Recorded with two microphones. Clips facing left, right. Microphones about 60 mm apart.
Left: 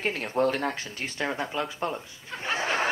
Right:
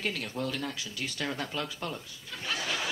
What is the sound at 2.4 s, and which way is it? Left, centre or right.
Snicker, left.